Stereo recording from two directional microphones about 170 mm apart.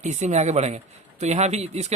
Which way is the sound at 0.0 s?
45° right (ahead or behind).